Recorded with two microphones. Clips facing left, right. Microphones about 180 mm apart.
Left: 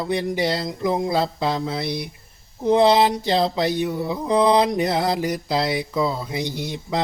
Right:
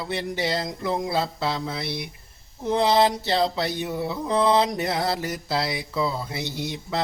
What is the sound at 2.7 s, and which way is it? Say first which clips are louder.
Mantra: left 4 dB; 15° left (ahead or behind).